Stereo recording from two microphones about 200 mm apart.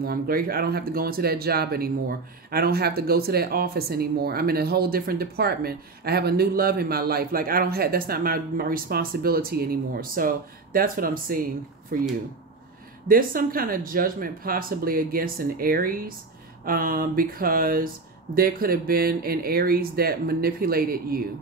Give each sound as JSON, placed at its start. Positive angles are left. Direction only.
{"t": 0.0, "sound": "speech", "side_deg": -50}
{"t": 13.1, "sound": "speech", "side_deg": -45}